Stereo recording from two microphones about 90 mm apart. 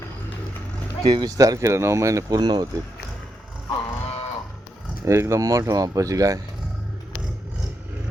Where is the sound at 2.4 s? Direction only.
50° right (ahead or behind).